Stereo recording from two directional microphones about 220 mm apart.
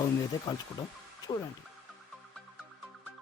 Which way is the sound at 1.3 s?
20° left (ahead or behind).